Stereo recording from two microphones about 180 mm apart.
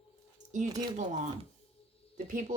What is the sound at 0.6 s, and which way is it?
Speech, 20° right (ahead or behind).